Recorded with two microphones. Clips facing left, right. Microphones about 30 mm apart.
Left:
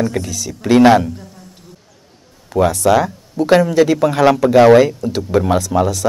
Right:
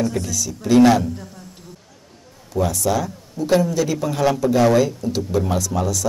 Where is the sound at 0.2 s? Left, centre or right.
Left.